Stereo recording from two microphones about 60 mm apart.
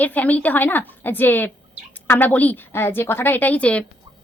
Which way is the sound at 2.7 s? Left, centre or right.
Left.